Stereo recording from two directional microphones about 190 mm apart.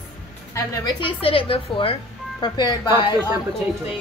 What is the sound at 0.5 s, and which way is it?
A woman's voice, 20° left (ahead or behind).